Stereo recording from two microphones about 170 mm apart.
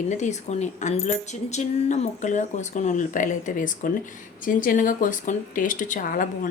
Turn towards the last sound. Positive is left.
turn(degrees=55)  # may be behind; listen again after turning